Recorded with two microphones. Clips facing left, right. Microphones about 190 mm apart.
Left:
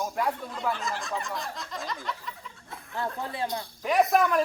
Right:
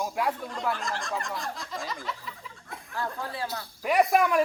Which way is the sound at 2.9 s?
20° left (ahead or behind).